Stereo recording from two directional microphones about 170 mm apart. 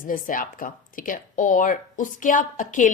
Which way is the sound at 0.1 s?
55° left (ahead or behind).